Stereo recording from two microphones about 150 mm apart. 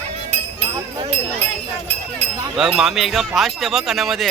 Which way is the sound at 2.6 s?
5° right (ahead or behind).